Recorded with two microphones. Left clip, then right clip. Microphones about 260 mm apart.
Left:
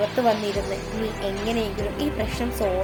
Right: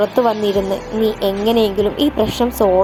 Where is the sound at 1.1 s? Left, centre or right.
Right.